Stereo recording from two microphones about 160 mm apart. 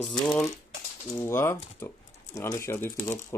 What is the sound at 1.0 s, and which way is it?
Speech, 15° left (ahead or behind).